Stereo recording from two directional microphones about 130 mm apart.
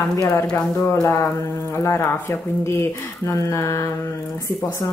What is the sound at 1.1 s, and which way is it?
A woman's voice, 25° left (ahead or behind).